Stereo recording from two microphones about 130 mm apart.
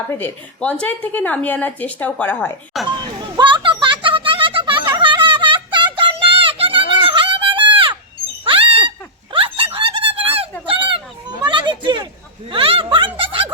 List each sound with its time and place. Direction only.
0.1 s a woman's voice: 15° left (ahead or behind)
2.8 s children playing: centre (ahead or behind)
3.2 s a sound: 35° right (ahead or behind)
13.1 s snicker: 45° right (ahead or behind)